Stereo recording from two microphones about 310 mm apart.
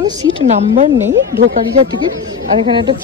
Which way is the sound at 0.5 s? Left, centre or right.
Right.